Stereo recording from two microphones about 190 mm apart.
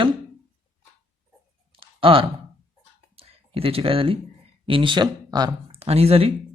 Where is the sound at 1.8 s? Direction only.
30° right (ahead or behind).